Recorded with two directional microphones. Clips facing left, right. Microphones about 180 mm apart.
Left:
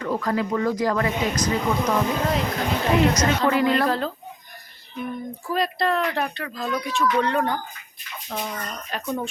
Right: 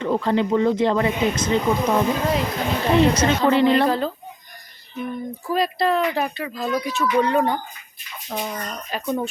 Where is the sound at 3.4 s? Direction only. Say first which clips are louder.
Right 5 dB; 25° right (ahead or behind).